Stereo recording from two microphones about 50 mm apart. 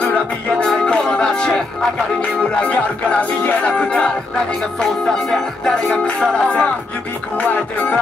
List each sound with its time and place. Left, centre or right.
0.0 s music: left
2.6 s music: left
4.7 s music: centre
6.0 s music: left